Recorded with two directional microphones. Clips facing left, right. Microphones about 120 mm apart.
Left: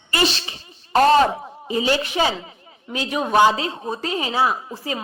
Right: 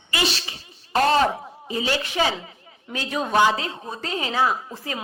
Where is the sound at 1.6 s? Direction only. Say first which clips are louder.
Left 5 dB; 20° left (ahead or behind).